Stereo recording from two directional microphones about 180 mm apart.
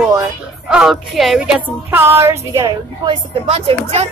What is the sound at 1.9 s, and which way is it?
A woman's voice, 10° right (ahead or behind).